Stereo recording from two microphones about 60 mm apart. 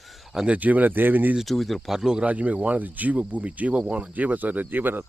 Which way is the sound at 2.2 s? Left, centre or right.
Right.